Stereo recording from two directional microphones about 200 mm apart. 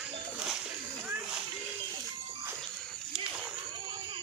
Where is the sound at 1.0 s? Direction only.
5° right (ahead or behind).